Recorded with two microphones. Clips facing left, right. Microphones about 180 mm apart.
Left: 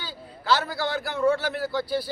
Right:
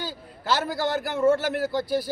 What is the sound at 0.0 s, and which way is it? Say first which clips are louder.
A man's voice: right 3 dB; 45° right (ahead or behind).